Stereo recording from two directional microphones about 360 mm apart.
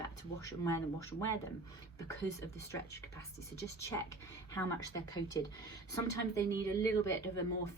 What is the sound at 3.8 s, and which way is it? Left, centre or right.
Speech, centre.